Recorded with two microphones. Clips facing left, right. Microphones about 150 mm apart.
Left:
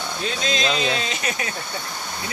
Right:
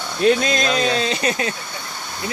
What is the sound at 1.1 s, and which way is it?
Speech, 35° right (ahead or behind).